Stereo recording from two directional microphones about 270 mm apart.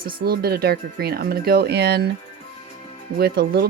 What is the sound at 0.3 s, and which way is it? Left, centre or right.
Speech, right.